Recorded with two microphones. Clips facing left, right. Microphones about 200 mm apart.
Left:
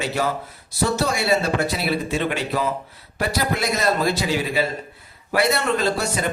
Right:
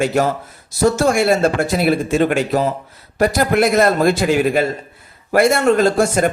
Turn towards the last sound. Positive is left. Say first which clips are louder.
# right 8 dB
turn(degrees=-50)  # may be behind; listen again after turning